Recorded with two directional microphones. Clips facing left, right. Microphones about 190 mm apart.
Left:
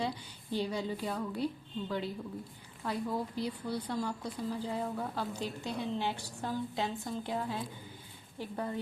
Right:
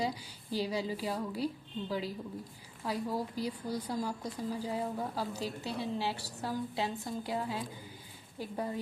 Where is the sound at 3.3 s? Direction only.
35° right (ahead or behind).